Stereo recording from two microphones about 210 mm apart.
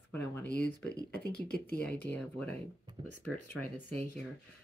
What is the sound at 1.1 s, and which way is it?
Speech, 50° left (ahead or behind).